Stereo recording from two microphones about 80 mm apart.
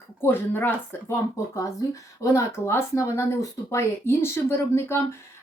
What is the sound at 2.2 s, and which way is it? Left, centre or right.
Speech, left.